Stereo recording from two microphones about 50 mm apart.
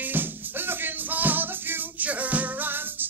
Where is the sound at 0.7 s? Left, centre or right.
Right.